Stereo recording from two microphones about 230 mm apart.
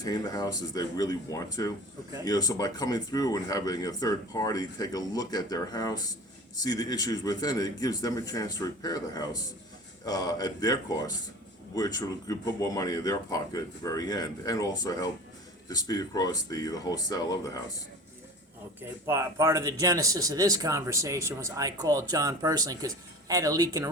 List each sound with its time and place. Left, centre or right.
0.0 s speech: centre
18.8 s speech: centre